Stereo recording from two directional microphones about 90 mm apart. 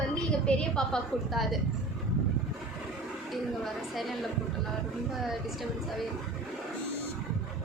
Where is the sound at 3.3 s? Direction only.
Centre (ahead or behind).